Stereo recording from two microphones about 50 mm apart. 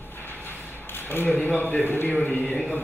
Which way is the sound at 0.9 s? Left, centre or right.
Left.